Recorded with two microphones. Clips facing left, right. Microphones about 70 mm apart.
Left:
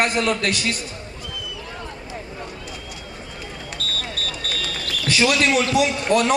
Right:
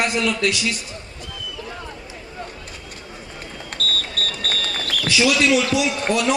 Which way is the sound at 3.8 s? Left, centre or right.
Right.